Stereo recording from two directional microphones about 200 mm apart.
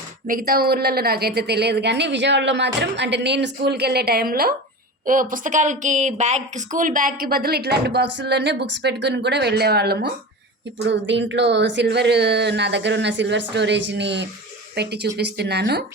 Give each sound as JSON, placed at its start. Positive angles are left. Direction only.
{"t": 0.3, "sound": "a woman's voice", "side_deg": -45}